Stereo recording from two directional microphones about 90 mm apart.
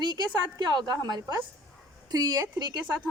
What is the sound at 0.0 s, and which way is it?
A woman's voice, 55° right (ahead or behind).